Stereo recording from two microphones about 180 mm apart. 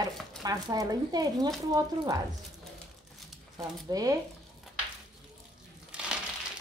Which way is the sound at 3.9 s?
20° right (ahead or behind).